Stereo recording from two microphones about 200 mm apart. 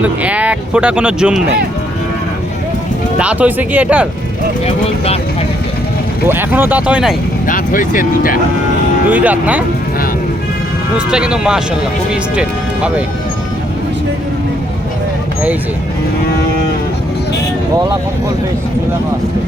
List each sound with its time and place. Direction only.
0.0 s speech: 5° right (ahead or behind)
3.2 s speech: 5° right (ahead or behind)
6.2 s speech: 10° right (ahead or behind)
7.4 s speech: 45° left (ahead or behind)
9.0 s speech: 5° right (ahead or behind)
10.9 s speech: 5° right (ahead or behind)